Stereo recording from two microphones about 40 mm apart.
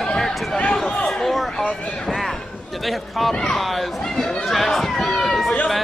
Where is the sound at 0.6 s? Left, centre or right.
Left.